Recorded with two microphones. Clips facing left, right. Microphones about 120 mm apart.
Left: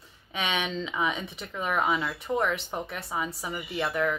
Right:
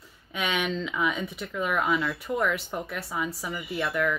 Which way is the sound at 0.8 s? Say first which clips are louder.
Right 1 dB; 30° left (ahead or behind).